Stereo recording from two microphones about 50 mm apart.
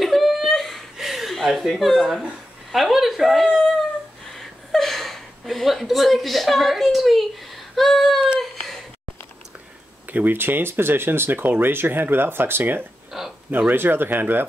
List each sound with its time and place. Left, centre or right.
0.0 s a sound: centre
2.0 s speech: centre
7.7 s a sound: centre
8.4 s meow: centre
10.0 s speech: right
13.1 s speech: centre
13.5 s speech: right